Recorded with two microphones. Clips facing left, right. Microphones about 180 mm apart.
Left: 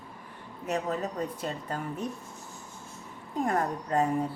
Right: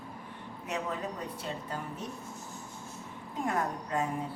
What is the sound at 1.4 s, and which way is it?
Speech, 50° left (ahead or behind).